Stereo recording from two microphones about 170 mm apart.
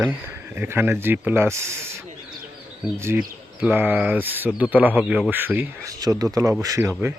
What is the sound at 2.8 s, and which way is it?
Speech, 15° right (ahead or behind).